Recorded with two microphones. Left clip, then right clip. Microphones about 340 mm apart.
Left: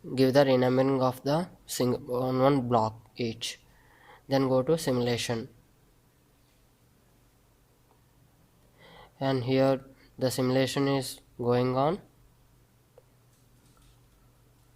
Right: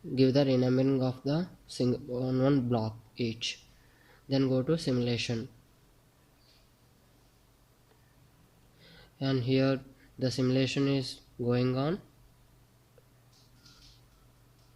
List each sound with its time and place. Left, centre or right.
0.1 s speech: left
8.8 s a man's voice: centre